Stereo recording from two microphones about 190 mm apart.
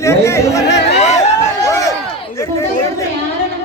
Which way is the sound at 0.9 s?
35° left (ahead or behind).